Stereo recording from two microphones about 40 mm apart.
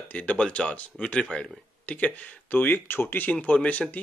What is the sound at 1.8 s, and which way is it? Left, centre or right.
Speech, left.